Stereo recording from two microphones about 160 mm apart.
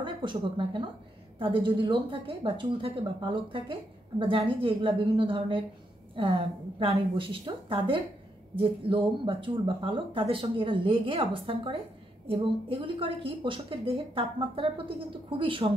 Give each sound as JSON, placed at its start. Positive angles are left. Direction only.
{"t": 0.0, "sound": "a woman's voice", "side_deg": -30}